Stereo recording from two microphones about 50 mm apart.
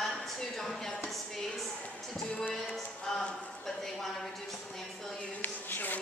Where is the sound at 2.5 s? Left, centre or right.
Centre.